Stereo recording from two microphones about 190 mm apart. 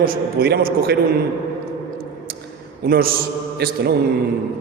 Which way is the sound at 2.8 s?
55° right (ahead or behind).